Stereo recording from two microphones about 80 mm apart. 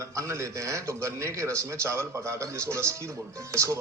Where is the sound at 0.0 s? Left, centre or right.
Right.